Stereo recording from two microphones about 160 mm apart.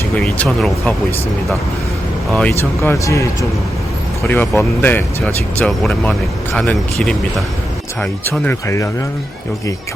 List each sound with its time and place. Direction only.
0.2 s speech: centre (ahead or behind)
2.3 s speech: 5° left (ahead or behind)
2.9 s a man's voice: 20° left (ahead or behind)
4.3 s speech: 10° left (ahead or behind)